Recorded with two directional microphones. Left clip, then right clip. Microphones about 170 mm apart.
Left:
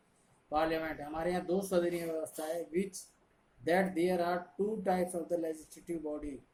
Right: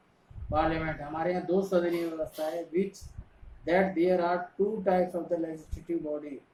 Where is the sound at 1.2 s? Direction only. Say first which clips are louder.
Right 6 dB; 65° left (ahead or behind).